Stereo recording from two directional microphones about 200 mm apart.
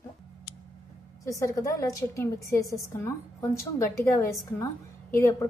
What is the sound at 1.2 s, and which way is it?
A woman's voice, 15° left (ahead or behind).